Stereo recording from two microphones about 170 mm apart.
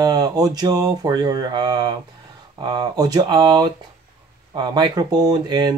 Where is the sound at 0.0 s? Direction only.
25° right (ahead or behind).